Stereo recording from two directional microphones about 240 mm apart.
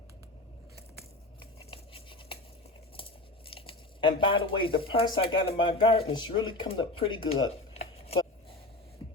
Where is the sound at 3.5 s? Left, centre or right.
Left.